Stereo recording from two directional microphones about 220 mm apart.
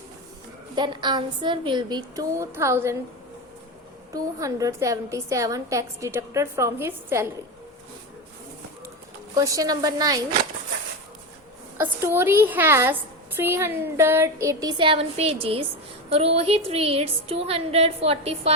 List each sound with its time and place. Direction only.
0.8 s a woman's voice: 20° right (ahead or behind)
4.1 s a woman's voice: 15° right (ahead or behind)
9.3 s a woman's voice: 15° right (ahead or behind)
11.8 s a woman's voice: 10° right (ahead or behind); by 18.5 s 25° right (ahead or behind)